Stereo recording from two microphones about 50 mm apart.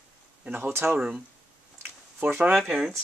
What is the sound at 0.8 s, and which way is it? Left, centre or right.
Speech, right.